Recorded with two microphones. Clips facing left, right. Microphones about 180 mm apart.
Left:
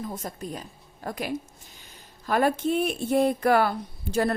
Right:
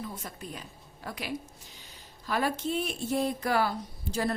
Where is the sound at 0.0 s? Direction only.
45° left (ahead or behind).